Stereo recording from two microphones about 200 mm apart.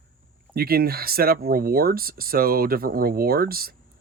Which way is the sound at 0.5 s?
50° right (ahead or behind).